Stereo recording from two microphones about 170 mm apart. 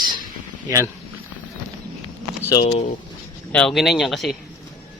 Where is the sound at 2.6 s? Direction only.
40° left (ahead or behind).